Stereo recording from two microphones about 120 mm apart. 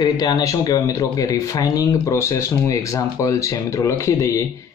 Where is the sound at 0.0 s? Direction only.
35° left (ahead or behind).